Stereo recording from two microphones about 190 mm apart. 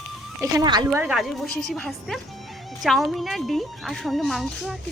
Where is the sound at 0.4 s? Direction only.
20° right (ahead or behind).